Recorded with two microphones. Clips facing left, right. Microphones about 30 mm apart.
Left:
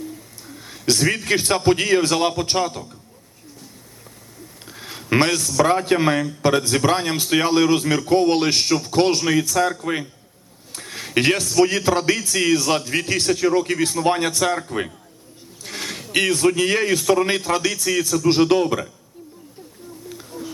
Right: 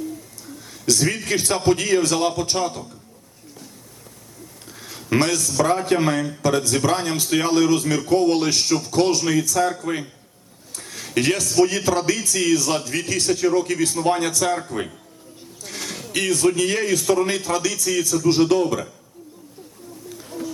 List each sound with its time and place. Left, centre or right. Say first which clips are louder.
0.9 s a man's voice: left 2 dB; left
4.6 s a man's voice: left 3 dB; left
10.7 s a sound: left 2 dB; left
11.6 s a man's voice: left 1 dB; left
15.6 s a man's voice: left 2 dB; left